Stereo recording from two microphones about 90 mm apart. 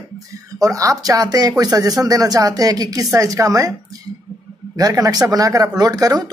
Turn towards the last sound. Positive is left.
turn(degrees=-45)  # may be behind; listen again after turning